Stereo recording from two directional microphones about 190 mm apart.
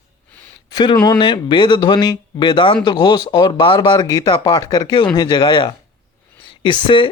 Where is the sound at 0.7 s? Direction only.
25° left (ahead or behind).